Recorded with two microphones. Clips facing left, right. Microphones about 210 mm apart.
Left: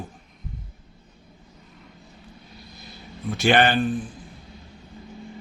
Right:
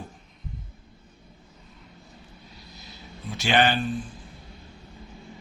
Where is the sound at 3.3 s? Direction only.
55° left (ahead or behind).